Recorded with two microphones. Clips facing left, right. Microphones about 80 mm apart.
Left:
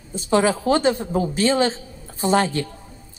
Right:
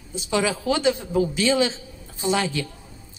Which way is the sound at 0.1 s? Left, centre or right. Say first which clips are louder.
Left 5 dB; left.